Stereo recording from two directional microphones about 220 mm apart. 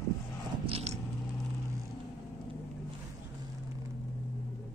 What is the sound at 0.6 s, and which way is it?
Biting, 25° right (ahead or behind).